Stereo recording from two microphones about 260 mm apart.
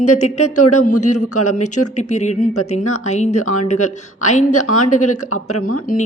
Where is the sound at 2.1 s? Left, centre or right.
Left.